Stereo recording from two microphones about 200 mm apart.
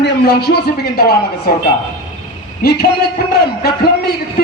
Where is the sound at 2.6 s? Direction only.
50° left (ahead or behind).